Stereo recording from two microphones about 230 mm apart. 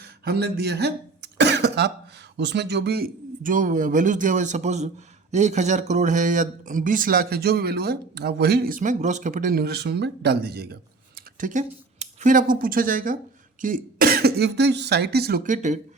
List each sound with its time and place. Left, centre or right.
0.0 s cough: right
2.4 s speech: right
11.3 s speech: right